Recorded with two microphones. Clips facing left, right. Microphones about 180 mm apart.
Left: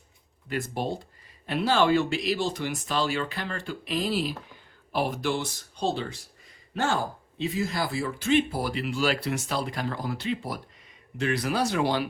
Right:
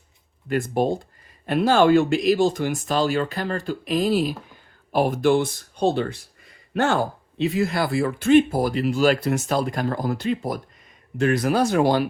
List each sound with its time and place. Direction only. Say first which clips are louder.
0.4 s speech: right 8 dB; 50° right (ahead or behind)